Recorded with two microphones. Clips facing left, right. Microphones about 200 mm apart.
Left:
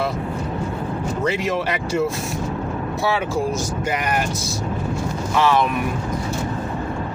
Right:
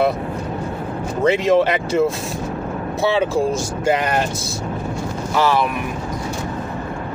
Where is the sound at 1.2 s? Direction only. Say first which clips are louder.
Right 9 dB; 25° right (ahead or behind).